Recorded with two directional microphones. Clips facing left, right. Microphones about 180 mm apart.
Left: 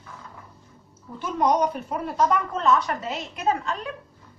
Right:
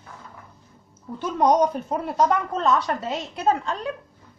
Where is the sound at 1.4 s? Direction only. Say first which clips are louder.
Right 3 dB; 30° right (ahead or behind).